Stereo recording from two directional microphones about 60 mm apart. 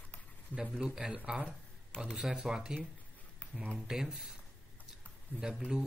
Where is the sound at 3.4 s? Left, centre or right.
Left.